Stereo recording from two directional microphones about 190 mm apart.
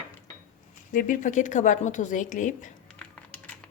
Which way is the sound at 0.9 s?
45° left (ahead or behind).